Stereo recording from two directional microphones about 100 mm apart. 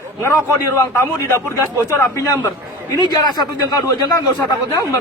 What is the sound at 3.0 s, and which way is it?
Speech, 45° left (ahead or behind).